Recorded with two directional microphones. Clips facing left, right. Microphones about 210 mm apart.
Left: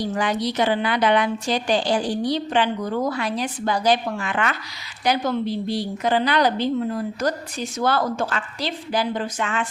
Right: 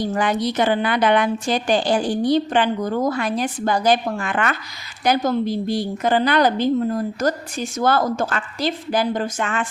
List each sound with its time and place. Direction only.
0.0 s a woman's voice: 50° right (ahead or behind)